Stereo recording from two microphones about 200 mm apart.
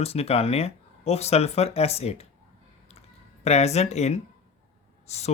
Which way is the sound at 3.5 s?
35° left (ahead or behind).